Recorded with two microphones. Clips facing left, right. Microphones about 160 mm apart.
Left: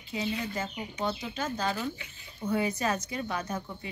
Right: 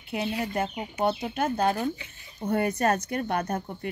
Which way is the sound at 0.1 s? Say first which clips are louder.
Right 4 dB; 60° right (ahead or behind).